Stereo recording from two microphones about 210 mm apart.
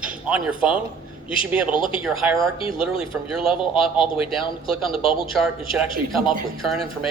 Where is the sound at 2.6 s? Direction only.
25° left (ahead or behind).